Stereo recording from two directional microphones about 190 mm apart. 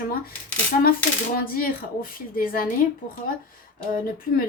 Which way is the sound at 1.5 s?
50° left (ahead or behind).